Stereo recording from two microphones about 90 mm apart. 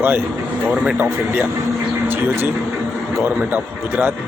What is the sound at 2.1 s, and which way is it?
A man's voice, 20° right (ahead or behind).